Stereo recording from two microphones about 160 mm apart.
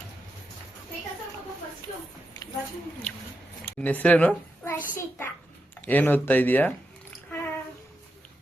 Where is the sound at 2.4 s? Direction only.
25° left (ahead or behind).